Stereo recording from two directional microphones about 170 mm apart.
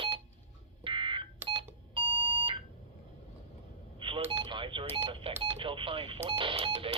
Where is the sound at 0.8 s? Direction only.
30° right (ahead or behind).